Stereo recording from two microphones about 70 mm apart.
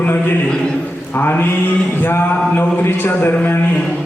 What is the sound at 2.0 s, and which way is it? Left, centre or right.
A man's voice, left.